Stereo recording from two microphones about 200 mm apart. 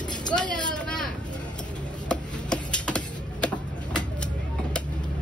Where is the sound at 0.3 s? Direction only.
5° left (ahead or behind).